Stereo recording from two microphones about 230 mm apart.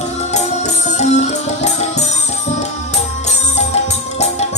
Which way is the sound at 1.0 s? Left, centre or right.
Left.